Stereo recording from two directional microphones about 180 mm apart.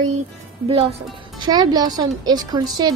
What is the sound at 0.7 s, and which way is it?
Speech, 35° right (ahead or behind).